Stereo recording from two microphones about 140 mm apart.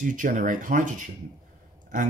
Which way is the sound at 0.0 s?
70° right (ahead or behind).